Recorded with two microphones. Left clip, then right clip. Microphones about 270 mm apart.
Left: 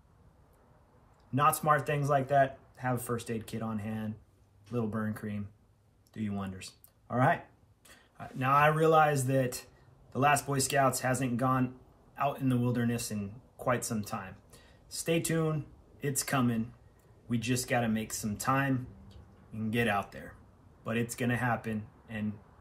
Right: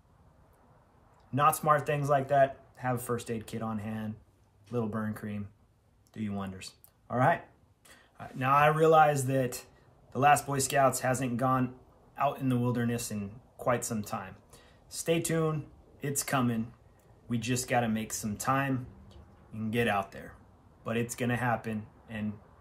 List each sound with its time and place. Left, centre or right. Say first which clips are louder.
1.3 s a man's voice: right 1 dB; centre